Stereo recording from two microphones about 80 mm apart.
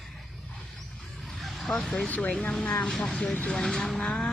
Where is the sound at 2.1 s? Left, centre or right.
Centre.